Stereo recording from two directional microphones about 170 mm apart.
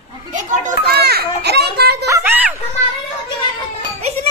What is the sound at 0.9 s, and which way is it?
A child's voice, 70° right (ahead or behind).